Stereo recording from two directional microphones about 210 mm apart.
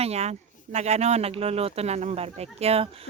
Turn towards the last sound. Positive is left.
turn(degrees=-30)  # may be behind; listen again after turning